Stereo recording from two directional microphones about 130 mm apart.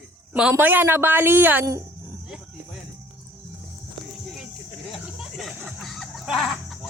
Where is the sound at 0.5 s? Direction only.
15° right (ahead or behind).